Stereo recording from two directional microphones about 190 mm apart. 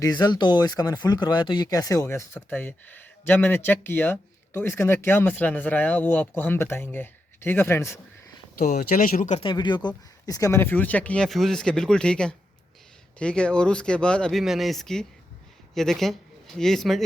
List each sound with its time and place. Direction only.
0.0 s speech: 20° left (ahead or behind)
8.5 s speech: 50° left (ahead or behind)
9.4 s speech: 25° left (ahead or behind); by 17.0 s centre (ahead or behind)